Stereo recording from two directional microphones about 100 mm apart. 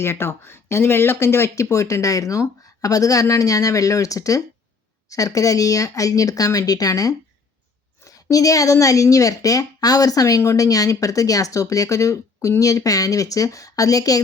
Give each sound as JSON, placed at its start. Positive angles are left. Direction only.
{"t": 0.0, "sound": "speech", "side_deg": 25}